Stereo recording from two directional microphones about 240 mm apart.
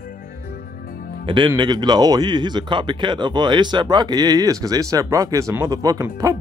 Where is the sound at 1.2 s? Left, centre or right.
Centre.